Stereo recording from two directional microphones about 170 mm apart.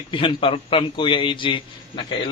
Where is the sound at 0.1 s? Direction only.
30° left (ahead or behind).